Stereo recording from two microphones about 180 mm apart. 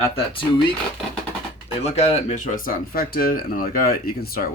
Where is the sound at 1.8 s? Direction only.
35° left (ahead or behind).